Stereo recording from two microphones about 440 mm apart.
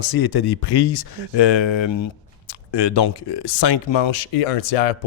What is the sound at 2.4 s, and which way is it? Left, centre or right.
Speech, left.